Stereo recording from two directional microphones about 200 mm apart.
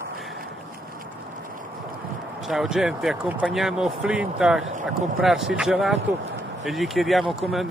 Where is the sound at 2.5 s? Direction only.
Centre (ahead or behind).